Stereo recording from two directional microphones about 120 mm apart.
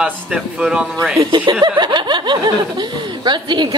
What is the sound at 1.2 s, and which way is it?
A woman's voice, 40° right (ahead or behind).